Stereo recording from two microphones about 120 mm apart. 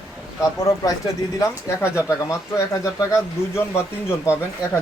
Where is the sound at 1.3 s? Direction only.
25° left (ahead or behind).